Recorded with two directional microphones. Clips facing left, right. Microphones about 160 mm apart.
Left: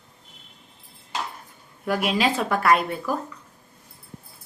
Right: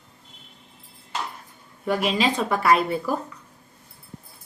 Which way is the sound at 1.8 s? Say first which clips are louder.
Even; centre (ahead or behind).